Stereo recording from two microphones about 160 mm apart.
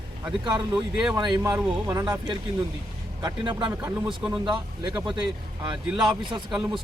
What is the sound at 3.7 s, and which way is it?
Speech, 10° right (ahead or behind).